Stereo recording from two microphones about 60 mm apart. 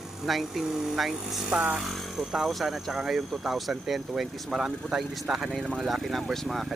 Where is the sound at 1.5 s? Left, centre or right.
Centre.